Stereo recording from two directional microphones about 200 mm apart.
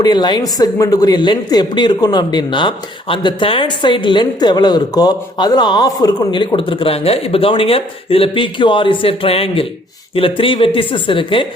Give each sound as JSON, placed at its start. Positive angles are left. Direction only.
{"t": 0.0, "sound": "speech", "side_deg": 20}